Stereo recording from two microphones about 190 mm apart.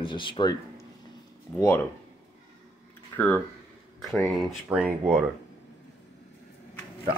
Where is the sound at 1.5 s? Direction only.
15° left (ahead or behind).